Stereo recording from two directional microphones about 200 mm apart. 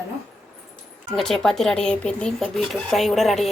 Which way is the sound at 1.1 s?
Centre (ahead or behind).